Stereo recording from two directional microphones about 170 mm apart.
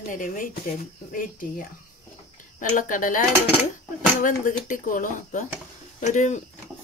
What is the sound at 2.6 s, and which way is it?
Speech, 50° left (ahead or behind).